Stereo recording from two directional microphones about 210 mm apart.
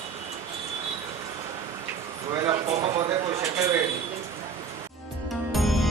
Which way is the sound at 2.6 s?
30° right (ahead or behind).